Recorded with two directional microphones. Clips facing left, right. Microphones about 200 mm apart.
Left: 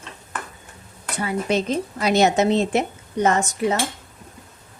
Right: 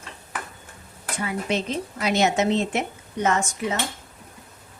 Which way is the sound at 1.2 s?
35° left (ahead or behind).